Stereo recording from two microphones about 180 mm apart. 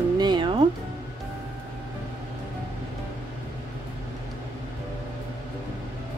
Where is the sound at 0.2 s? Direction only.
25° right (ahead or behind).